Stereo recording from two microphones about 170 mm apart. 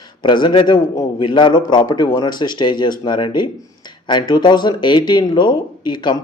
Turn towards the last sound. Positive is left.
turn(degrees=25)  # may be behind; listen again after turning